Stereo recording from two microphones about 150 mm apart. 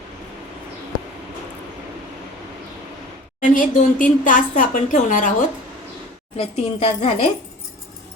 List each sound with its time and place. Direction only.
3.4 s a woman's voice: 60° left (ahead or behind)
6.3 s speech: 45° left (ahead or behind)